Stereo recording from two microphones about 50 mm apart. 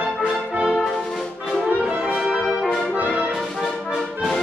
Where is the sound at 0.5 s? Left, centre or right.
Right.